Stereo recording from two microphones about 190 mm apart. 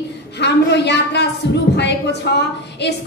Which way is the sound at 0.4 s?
65° left (ahead or behind).